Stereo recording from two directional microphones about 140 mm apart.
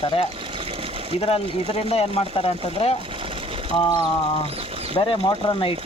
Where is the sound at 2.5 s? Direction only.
45° left (ahead or behind).